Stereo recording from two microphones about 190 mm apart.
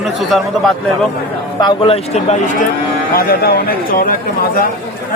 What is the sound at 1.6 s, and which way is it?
Speech, 25° left (ahead or behind).